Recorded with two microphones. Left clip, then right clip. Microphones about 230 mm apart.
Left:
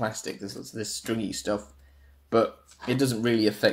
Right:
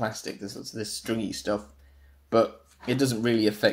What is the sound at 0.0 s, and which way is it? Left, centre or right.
Speech, centre.